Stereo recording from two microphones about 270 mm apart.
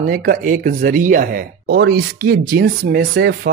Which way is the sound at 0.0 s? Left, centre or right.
Right.